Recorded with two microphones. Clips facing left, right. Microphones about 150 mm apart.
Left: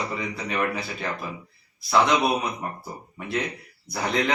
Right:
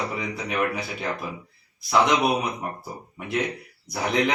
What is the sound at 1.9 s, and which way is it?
Speech, 10° right (ahead or behind).